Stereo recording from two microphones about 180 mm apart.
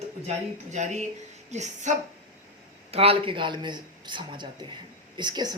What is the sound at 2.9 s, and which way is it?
A woman's voice, 35° right (ahead or behind).